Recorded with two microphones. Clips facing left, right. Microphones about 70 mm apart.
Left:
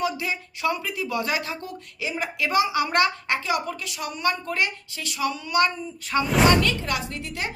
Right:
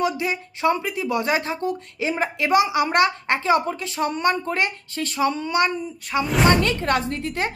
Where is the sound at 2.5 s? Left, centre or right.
Right.